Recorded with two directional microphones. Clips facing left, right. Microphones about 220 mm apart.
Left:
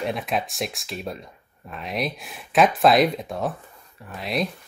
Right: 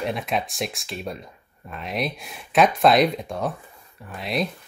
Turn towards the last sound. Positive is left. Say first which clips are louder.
# even
turn(degrees=0)  # may be behind; listen again after turning